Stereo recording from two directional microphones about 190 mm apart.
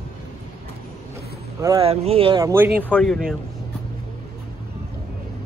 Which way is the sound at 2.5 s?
10° right (ahead or behind).